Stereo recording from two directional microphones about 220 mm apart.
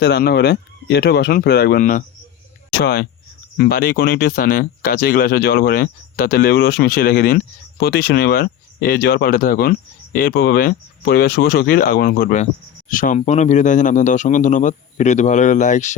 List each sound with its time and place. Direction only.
0.0 s a man's voice: 45° left (ahead or behind)